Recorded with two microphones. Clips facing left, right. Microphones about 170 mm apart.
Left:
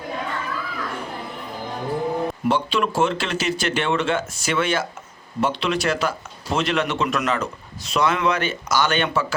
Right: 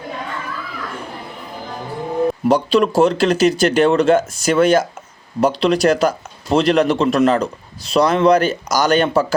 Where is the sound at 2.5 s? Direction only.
40° right (ahead or behind).